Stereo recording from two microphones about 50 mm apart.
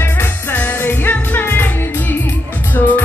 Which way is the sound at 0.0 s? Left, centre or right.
Left.